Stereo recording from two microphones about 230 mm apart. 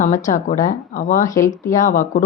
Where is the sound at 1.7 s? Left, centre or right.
Left.